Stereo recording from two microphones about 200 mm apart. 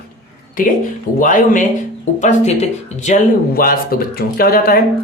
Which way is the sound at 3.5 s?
45° left (ahead or behind).